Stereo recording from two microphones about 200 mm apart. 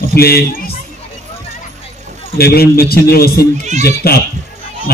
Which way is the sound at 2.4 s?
50° left (ahead or behind).